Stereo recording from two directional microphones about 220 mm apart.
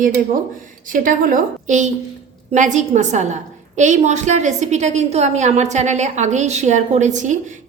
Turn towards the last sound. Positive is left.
turn(degrees=-35)  # may be behind; listen again after turning